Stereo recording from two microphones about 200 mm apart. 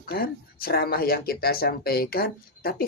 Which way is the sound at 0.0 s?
50° left (ahead or behind).